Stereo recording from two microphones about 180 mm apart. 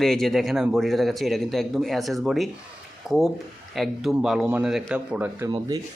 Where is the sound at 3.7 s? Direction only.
Centre (ahead or behind).